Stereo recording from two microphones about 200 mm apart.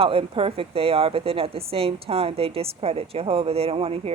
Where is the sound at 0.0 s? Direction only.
30° right (ahead or behind).